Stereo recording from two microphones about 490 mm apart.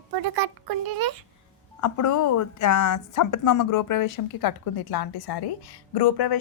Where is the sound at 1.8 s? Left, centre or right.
Left.